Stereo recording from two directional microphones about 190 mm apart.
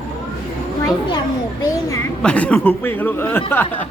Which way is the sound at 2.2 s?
5° left (ahead or behind).